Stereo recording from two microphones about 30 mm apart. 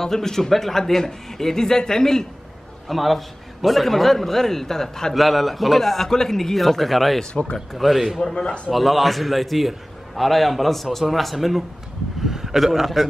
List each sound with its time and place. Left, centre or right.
0.0 s a man's voice: centre
2.9 s a man's voice: centre
5.1 s a man's voice: centre
6.0 s a man's voice: centre
8.2 s a man's voice: left
8.7 s a man's voice: centre